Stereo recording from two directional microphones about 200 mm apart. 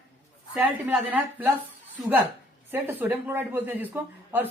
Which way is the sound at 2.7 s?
10° right (ahead or behind).